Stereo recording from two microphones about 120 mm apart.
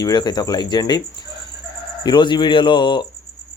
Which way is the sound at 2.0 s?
40° left (ahead or behind).